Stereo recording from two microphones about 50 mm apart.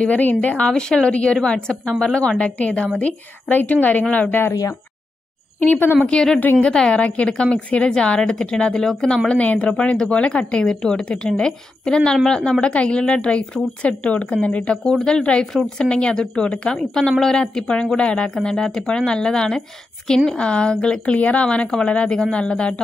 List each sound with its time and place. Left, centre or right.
0.0 s speech: left
0.7 s a woman's voice: centre; by 4.4 s left
5.7 s a woman's voice: left
6.1 s a woman's voice: centre
9.4 s a woman's voice: left
14.7 s a woman's voice: centre
15.4 s a woman's voice: centre
15.8 s a woman's voice: centre
18.3 s a woman's voice: centre